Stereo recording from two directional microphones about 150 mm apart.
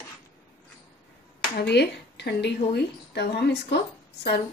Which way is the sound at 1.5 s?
90° left.